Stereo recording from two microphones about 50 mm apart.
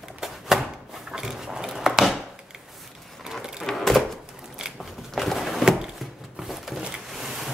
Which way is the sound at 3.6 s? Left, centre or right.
Centre.